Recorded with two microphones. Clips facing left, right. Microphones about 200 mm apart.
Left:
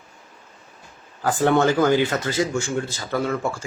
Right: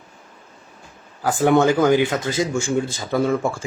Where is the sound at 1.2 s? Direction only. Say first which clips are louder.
Right 2 dB; 10° right (ahead or behind).